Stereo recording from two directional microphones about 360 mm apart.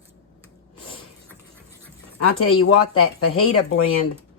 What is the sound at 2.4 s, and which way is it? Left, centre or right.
Speech, left.